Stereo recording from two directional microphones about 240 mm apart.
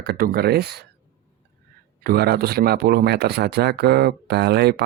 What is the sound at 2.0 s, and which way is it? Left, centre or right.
Speech, right.